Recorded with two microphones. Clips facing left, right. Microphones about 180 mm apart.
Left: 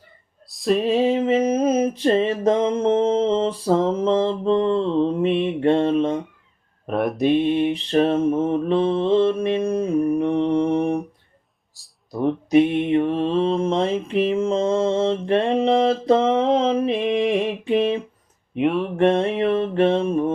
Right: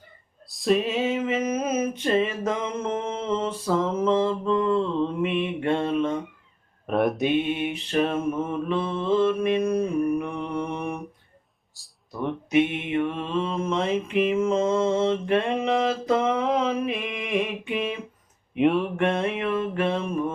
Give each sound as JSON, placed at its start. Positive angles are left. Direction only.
{"t": 0.4, "sound": "female singing", "side_deg": 0}
{"t": 0.8, "sound": "music", "side_deg": 35}
{"t": 6.8, "sound": "speech", "side_deg": 0}
{"t": 7.3, "sound": "mantra", "side_deg": 35}
{"t": 11.8, "sound": "a sound", "side_deg": 0}
{"t": 12.1, "sound": "mantra", "side_deg": 35}
{"t": 18.5, "sound": "speech", "side_deg": 0}
{"t": 18.9, "sound": "music", "side_deg": 35}